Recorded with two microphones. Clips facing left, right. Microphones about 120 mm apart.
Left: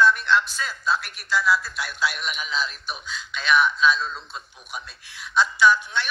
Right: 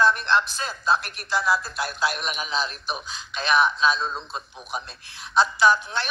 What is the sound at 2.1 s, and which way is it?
A man's voice, 25° right (ahead or behind).